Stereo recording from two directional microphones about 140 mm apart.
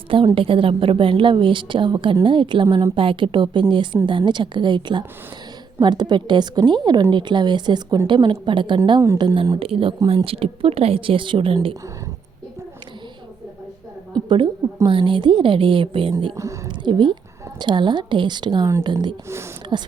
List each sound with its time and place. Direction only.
0.3 s a woman's voice: 40° right (ahead or behind)
14.3 s a woman's voice: 35° right (ahead or behind)
16.1 s a woman's voice: 25° right (ahead or behind)